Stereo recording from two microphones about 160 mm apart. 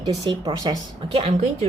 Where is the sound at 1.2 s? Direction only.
45° right (ahead or behind).